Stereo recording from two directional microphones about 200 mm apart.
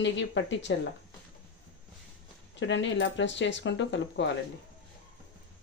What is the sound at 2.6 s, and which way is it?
Speech, 65° left (ahead or behind).